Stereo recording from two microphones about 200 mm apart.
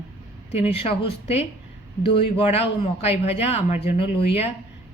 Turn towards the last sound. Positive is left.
turn(degrees=30)  # may be behind; listen again after turning